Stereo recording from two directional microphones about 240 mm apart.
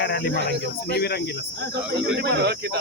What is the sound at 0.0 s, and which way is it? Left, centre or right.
Cricket, left.